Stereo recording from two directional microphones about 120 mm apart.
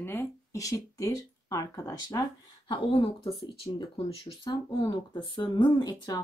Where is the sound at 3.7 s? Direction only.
45° left (ahead or behind).